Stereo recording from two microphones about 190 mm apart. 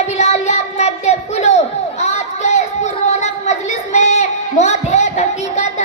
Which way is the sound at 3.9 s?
35° left (ahead or behind).